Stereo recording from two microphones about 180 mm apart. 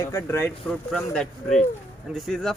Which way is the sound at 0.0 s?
20° left (ahead or behind).